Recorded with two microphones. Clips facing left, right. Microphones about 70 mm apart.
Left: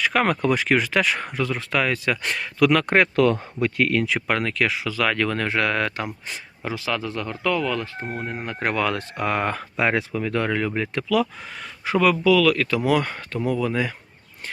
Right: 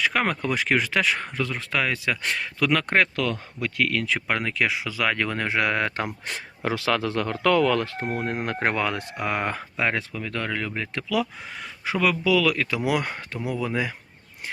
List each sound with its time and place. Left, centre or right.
0.0 s speech: centre
3.2 s speech: left
4.3 s speech: centre
6.7 s speech: right
8.5 s speech: right
9.2 s speech: centre
9.9 s speech: centre
10.9 s speech: centre